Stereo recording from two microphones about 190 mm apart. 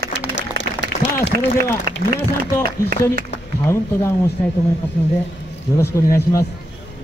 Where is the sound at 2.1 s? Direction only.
15° left (ahead or behind).